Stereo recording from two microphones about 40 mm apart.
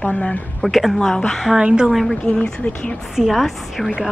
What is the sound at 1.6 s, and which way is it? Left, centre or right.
Speech, right.